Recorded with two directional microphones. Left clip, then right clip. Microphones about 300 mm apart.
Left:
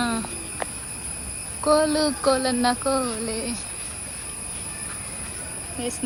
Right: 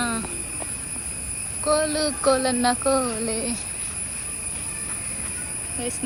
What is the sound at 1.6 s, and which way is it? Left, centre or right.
Speech, centre.